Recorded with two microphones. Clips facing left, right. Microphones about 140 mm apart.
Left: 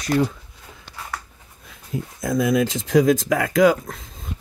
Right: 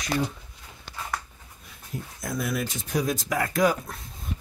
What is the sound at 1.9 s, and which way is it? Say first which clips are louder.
Speech: left 9 dB; 90° left.